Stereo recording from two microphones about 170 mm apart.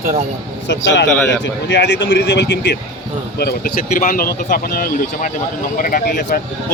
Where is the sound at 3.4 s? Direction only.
65° left (ahead or behind).